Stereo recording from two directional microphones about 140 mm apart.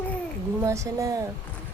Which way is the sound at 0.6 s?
20° right (ahead or behind).